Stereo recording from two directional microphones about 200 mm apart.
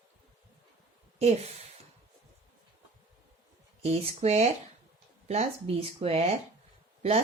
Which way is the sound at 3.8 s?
30° right (ahead or behind).